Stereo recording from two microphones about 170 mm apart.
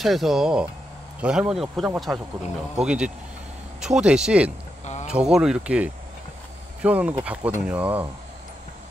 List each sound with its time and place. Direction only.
0.0 s speech: centre (ahead or behind)
4.8 s a sound: 40° left (ahead or behind)
5.1 s speech: 5° right (ahead or behind)